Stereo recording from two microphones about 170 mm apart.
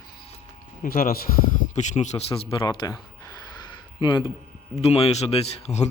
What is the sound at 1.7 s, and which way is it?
Speech, 45° left (ahead or behind).